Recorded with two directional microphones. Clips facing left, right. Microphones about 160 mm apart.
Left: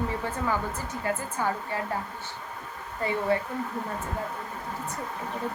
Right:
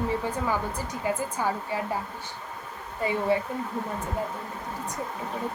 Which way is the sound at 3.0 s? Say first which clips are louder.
Right 1 dB; 15° right (ahead or behind).